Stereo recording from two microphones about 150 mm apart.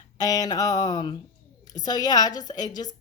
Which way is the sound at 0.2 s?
25° left (ahead or behind).